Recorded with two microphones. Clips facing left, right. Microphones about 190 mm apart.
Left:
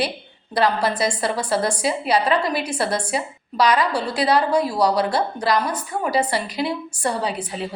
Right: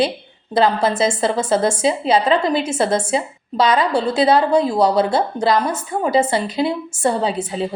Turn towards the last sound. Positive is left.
turn(degrees=-25)  # may be behind; listen again after turning